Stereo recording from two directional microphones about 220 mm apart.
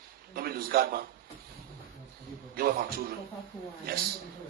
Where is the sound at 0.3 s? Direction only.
45° right (ahead or behind).